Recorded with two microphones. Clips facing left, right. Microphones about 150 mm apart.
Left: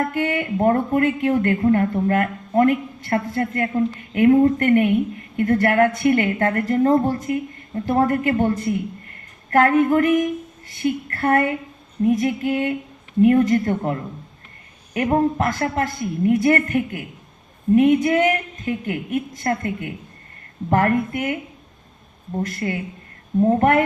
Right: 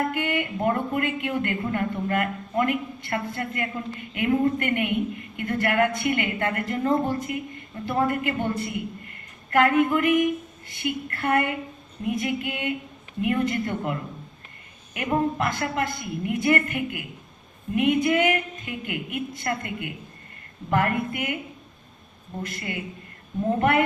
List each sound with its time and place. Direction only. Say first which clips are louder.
0.1 s a woman's voice: left 5 dB; 40° left (ahead or behind)
14.9 s a woman's voice: left 6 dB; 40° left (ahead or behind)
22.4 s speech: left 7 dB; 40° left (ahead or behind)